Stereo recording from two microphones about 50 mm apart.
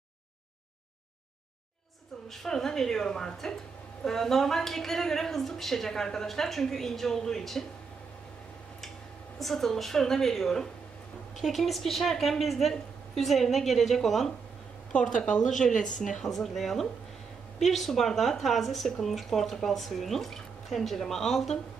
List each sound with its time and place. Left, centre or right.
2.4 s a woman's voice: centre
9.4 s a woman's voice: centre
15.0 s a woman's voice: centre
16.2 s a woman's voice: centre